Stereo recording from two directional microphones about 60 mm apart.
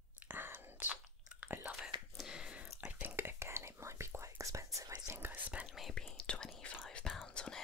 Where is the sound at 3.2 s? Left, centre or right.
Right.